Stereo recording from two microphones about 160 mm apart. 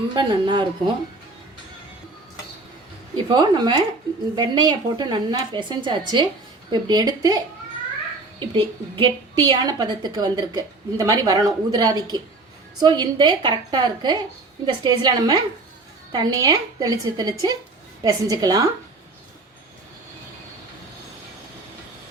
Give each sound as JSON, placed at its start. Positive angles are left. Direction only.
{"t": 0.1, "sound": "a woman's voice", "side_deg": -30}
{"t": 3.2, "sound": "a woman's voice", "side_deg": -25}
{"t": 8.4, "sound": "a woman's voice", "side_deg": -30}